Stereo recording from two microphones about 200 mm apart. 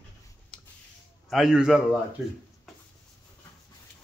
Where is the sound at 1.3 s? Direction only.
Centre (ahead or behind).